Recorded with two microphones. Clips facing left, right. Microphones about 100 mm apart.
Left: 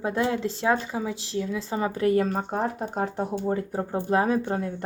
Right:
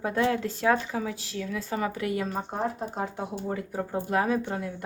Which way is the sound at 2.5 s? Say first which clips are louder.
Left 3 dB; 55° left (ahead or behind).